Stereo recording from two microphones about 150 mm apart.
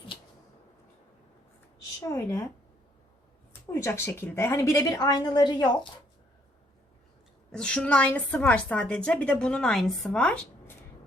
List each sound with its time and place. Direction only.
2.0 s a woman's voice: 20° left (ahead or behind)
3.7 s a woman's voice: 20° left (ahead or behind)
7.5 s a woman's voice: 5° left (ahead or behind)